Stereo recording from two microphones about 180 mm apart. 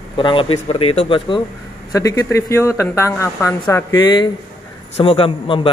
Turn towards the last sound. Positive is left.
turn(degrees=30)  # may be behind; listen again after turning